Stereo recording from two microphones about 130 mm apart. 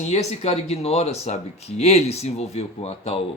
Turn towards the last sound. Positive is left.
turn(degrees=55)  # may be behind; listen again after turning